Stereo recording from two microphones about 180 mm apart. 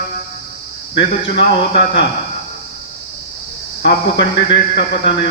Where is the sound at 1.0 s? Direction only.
75° left (ahead or behind).